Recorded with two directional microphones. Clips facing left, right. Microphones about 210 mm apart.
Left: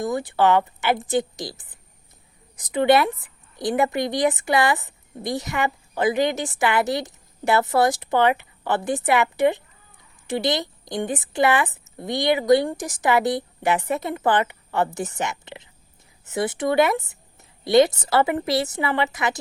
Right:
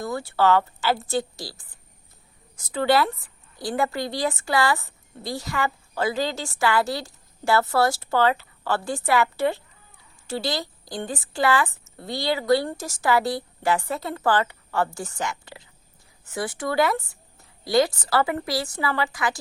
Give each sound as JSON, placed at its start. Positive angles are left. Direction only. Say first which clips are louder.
{"t": 0.0, "sound": "a woman's voice", "louder": "left 2 dB", "side_deg": 15}